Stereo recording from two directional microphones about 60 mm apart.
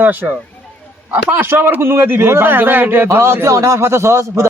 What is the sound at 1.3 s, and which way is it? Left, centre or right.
Speech, right.